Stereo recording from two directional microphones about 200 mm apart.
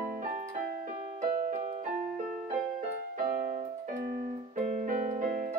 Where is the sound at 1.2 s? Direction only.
45° right (ahead or behind).